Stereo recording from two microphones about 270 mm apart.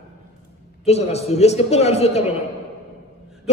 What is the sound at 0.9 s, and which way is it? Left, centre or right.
A man's voice, left.